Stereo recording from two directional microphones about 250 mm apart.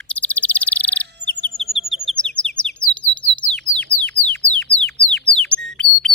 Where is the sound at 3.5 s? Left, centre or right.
Centre.